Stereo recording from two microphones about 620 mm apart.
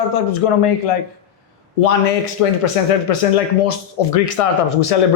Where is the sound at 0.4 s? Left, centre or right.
Left.